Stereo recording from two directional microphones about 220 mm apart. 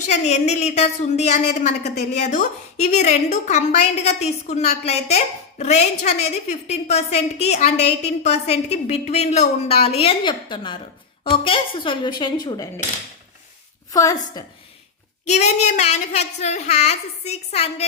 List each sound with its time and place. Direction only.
0.0 s a woman's voice: 30° left (ahead or behind)
13.9 s a woman's voice: 15° left (ahead or behind)
15.3 s a woman's voice: 30° left (ahead or behind)